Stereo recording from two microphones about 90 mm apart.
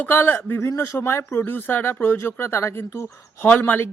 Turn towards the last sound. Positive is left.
turn(degrees=25)  # may be behind; listen again after turning